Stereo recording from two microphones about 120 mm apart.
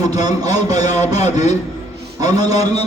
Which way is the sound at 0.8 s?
70° left (ahead or behind).